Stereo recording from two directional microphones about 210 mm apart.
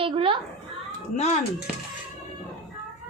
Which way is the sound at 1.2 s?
30° left (ahead or behind).